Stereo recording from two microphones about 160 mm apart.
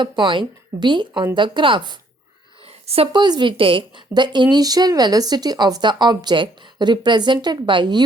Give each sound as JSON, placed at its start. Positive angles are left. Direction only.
{"t": 0.0, "sound": "a woman's voice", "side_deg": -30}